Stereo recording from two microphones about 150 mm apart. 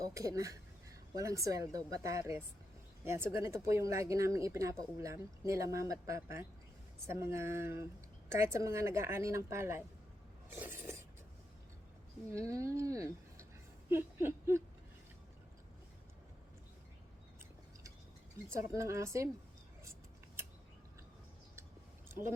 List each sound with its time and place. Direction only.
0.0 s a woman's voice: 20° right (ahead or behind)
10.5 s a sound: 15° right (ahead or behind)
12.3 s a woman's voice: 20° right (ahead or behind)
18.7 s speech: 20° right (ahead or behind)
22.1 s speech: 20° right (ahead or behind)